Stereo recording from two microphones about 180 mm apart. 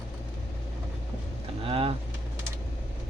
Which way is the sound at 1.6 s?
30° right (ahead or behind).